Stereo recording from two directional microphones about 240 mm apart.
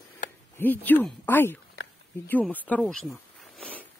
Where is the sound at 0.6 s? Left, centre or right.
Centre.